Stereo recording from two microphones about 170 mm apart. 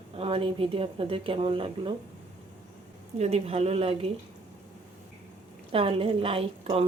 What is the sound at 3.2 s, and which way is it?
Speech, 40° right (ahead or behind).